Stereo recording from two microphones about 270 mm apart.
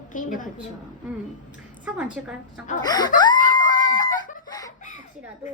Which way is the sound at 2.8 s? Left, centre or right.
Centre.